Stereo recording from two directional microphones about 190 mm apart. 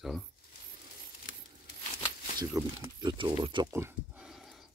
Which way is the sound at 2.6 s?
20° right (ahead or behind).